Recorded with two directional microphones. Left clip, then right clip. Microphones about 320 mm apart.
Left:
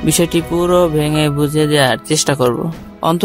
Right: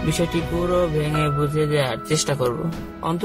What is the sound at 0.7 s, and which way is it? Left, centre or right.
A man's voice, left.